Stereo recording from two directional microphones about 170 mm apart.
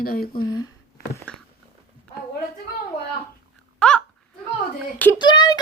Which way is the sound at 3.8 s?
5° left (ahead or behind).